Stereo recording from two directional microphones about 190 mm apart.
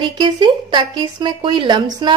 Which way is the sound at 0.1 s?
25° right (ahead or behind).